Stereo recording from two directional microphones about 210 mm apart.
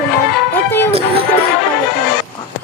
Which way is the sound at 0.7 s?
10° left (ahead or behind).